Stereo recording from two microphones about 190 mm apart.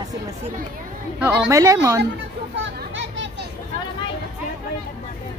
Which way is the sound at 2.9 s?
70° right (ahead or behind).